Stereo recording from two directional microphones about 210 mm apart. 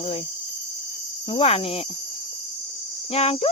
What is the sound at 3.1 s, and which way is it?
Speech, 30° left (ahead or behind).